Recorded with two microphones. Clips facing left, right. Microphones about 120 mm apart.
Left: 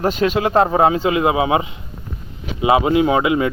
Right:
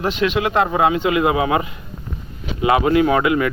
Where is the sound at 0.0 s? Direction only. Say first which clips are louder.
Left 2 dB; 40° left (ahead or behind).